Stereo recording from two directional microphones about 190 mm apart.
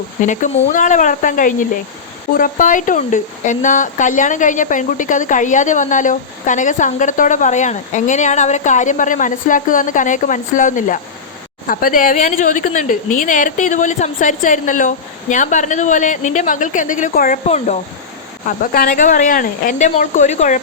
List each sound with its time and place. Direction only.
0.2 s a woman's voice: 40° left (ahead or behind)